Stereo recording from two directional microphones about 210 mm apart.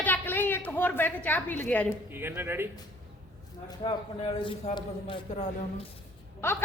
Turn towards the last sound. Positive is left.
turn(degrees=10)  # may be behind; listen again after turning